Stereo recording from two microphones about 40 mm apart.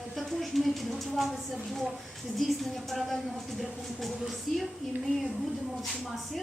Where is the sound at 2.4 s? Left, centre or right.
Centre.